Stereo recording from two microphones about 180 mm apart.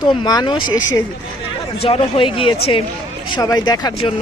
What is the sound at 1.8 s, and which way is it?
Speech, 30° left (ahead or behind).